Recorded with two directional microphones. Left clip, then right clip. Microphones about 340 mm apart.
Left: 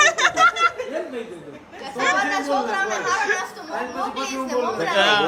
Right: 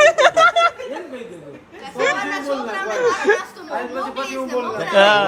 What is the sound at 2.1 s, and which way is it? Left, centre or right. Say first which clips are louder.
Chatter: left 2 dB; centre.